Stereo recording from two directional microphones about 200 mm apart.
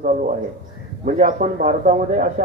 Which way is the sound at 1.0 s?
40° right (ahead or behind).